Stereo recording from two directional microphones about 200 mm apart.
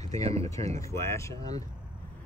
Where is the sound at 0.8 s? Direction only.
15° left (ahead or behind).